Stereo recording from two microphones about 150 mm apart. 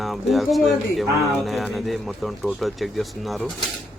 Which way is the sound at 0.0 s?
Centre (ahead or behind).